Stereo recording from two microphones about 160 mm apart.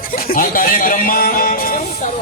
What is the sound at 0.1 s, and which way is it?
Music, 65° left (ahead or behind).